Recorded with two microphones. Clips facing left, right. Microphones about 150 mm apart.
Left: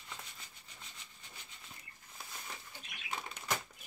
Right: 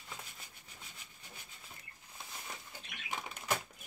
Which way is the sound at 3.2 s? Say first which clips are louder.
Right 2 dB; 10° right (ahead or behind).